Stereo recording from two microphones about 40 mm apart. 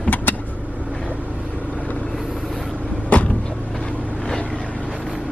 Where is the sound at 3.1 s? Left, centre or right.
Left.